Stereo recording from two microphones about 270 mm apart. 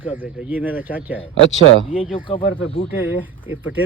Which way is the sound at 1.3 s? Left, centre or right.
Left.